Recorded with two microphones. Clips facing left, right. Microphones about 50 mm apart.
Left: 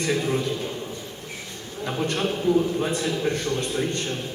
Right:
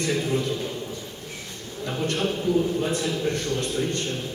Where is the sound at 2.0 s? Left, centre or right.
Left.